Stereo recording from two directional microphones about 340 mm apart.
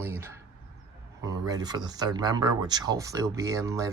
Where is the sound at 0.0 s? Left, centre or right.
Centre.